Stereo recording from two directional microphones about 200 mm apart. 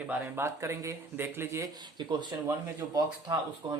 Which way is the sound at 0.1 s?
10° right (ahead or behind).